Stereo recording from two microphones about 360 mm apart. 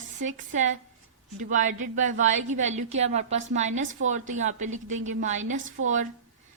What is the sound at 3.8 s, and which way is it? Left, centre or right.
Speech, right.